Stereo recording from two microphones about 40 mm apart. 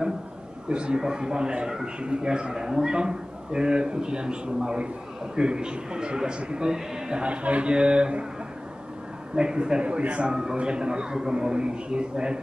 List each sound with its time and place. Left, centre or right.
0.7 s a man's voice: right
7.2 s a man's voice: right
9.3 s a man's voice: right